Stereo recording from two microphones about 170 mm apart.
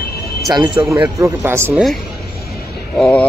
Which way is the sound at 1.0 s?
15° right (ahead or behind).